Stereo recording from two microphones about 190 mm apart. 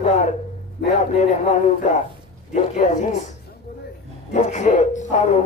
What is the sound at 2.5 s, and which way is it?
Speech, 40° left (ahead or behind).